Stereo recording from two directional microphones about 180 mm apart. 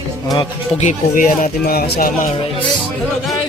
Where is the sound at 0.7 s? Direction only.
45° left (ahead or behind).